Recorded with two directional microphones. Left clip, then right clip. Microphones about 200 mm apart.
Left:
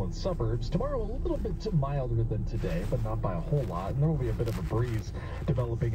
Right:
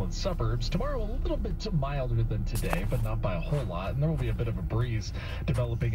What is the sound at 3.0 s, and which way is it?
Speech, 45° right (ahead or behind).